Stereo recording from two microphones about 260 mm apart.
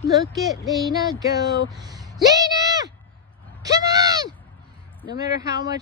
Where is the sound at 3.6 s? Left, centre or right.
Centre.